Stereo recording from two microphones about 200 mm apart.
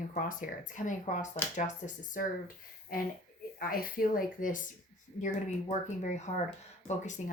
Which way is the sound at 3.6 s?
45° left (ahead or behind).